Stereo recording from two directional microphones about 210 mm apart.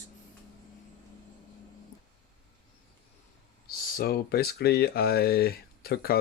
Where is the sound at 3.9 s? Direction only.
45° left (ahead or behind).